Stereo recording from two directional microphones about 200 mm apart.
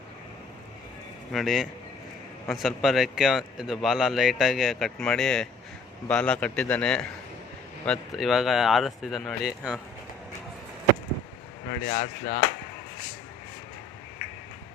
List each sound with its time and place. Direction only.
1.3 s speech: centre (ahead or behind)
11.9 s speech: 40° left (ahead or behind)